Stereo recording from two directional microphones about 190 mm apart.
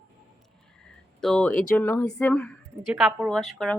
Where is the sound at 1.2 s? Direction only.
5° left (ahead or behind).